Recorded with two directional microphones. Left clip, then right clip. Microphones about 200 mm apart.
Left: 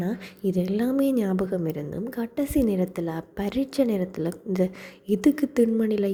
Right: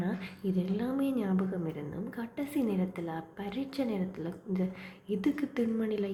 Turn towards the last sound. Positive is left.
turn(degrees=45)  # may be behind; listen again after turning